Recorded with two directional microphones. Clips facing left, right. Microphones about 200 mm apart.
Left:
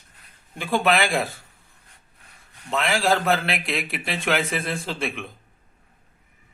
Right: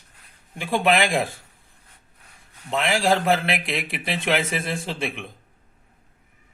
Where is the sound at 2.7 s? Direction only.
15° right (ahead or behind).